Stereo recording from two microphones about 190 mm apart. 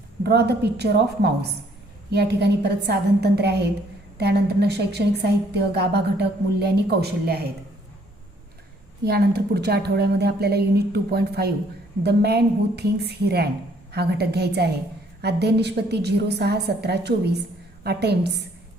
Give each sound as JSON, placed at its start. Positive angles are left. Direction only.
{"t": 0.2, "sound": "a woman's voice", "side_deg": -60}
{"t": 9.0, "sound": "a woman's voice", "side_deg": -55}